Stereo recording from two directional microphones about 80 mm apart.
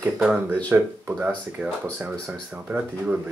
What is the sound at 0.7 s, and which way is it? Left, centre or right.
Speech, right.